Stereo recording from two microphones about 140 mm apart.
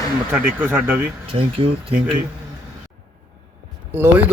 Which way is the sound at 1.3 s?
40° right (ahead or behind).